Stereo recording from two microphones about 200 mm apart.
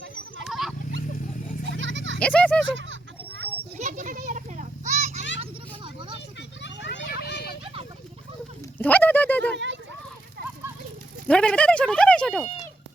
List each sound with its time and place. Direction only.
0.4 s a sound: centre (ahead or behind)
1.6 s goat: 65° right (ahead or behind)
2.1 s speech: 5° left (ahead or behind)
2.6 s children playing: 65° right (ahead or behind)
3.8 s children playing: 40° right (ahead or behind)
5.4 s a sound: 25° right (ahead or behind)
6.1 s children playing: 60° left (ahead or behind)
8.8 s a sound: 10° left (ahead or behind)
11.3 s speech: 5° left (ahead or behind)